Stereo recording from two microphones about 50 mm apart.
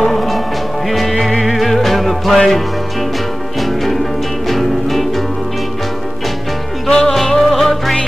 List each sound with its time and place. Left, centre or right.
0.0 s music: centre
4.5 s music: centre
6.9 s music: centre
7.2 s music: centre